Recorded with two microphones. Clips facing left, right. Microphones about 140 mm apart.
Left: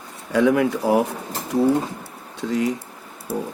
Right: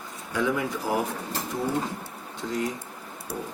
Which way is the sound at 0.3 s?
85° left.